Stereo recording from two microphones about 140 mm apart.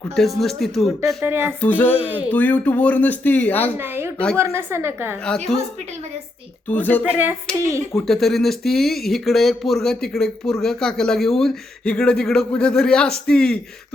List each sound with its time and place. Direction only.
0.2 s speech: centre (ahead or behind)
1.0 s a woman's voice: 15° right (ahead or behind)
1.6 s speech: 15° left (ahead or behind)
2.0 s a woman's voice: 10° right (ahead or behind)
2.3 s speech: 10° left (ahead or behind)
3.8 s a sound: 15° right (ahead or behind)
4.4 s a woman's voice: 20° right (ahead or behind)
6.7 s speech: 10° left (ahead or behind)
7.1 s a woman's voice: 15° right (ahead or behind)
8.0 s speech: centre (ahead or behind)